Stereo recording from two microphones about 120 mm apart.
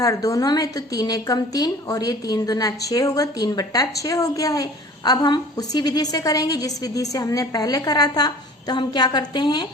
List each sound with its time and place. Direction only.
0.0 s a woman's voice: 30° left (ahead or behind)